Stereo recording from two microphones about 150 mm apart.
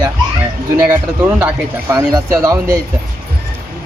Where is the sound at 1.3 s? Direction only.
15° right (ahead or behind).